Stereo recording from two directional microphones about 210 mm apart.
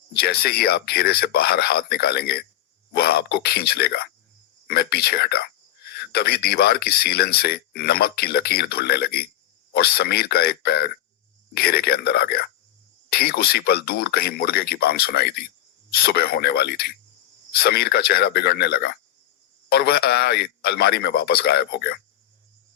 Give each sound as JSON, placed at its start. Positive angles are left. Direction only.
{"t": 0.1, "sound": "speech", "side_deg": 50}